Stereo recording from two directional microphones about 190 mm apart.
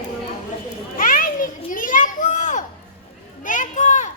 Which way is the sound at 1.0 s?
45° left (ahead or behind).